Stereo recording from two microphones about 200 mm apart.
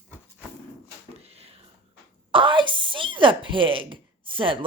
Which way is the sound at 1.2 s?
30° right (ahead or behind).